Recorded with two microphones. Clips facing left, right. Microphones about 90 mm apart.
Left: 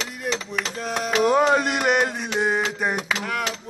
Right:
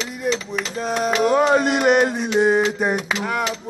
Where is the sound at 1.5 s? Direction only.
20° right (ahead or behind).